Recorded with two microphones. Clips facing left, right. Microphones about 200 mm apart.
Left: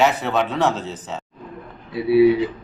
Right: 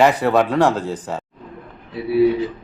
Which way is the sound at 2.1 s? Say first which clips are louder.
Left 2 dB; 10° left (ahead or behind).